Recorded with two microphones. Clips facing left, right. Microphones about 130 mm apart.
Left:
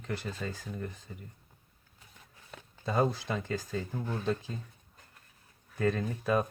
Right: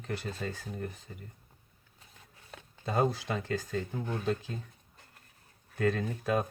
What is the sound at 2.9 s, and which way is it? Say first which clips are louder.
Speech: even; 60° right (ahead or behind).